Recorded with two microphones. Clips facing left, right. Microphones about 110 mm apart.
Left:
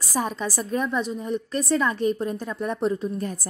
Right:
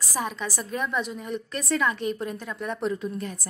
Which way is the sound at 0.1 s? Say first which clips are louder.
Left 4 dB; 35° left (ahead or behind).